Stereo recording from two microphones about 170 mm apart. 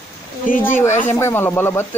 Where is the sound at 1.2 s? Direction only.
15° left (ahead or behind).